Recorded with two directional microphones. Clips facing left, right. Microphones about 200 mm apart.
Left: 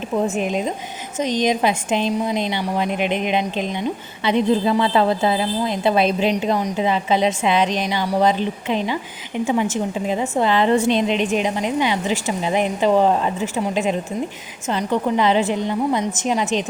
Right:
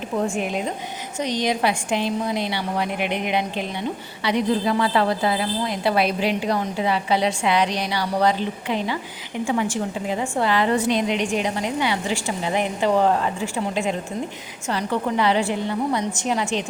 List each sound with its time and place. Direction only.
0.3 s a woman's voice: 20° left (ahead or behind)